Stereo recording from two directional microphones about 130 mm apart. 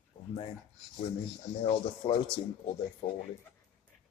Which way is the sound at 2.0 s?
45° left (ahead or behind).